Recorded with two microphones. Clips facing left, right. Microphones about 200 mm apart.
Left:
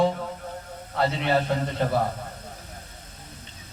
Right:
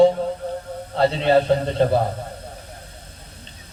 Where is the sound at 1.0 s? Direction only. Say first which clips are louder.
Right 6 dB; 30° right (ahead or behind).